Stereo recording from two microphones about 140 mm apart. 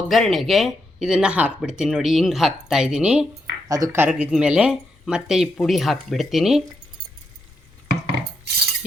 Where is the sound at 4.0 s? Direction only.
5° right (ahead or behind).